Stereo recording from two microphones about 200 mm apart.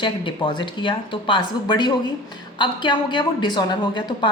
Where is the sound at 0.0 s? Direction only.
25° left (ahead or behind).